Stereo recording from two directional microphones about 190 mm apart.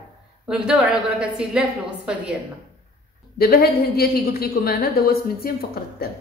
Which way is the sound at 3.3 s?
55° left (ahead or behind).